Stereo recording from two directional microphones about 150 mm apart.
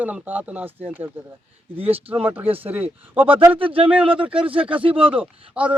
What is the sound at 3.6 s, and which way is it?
Speech, 35° right (ahead or behind).